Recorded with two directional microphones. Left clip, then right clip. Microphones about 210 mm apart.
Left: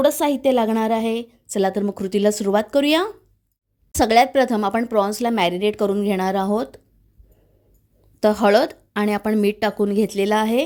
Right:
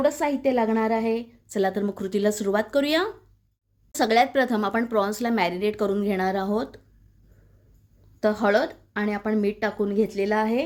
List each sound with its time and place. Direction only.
0.0 s a woman's voice: 40° left (ahead or behind)
8.2 s a woman's voice: 35° left (ahead or behind)